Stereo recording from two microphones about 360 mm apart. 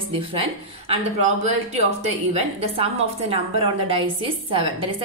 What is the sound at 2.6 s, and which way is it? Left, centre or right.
Speech, centre.